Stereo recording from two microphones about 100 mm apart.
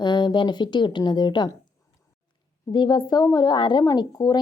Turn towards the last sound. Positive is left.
turn(degrees=40)  # may be behind; listen again after turning